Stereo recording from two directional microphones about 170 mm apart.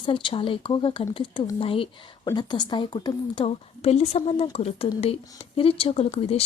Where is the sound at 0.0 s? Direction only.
30° left (ahead or behind).